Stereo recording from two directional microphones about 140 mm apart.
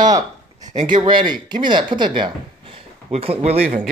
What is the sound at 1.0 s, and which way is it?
Speech, 35° right (ahead or behind).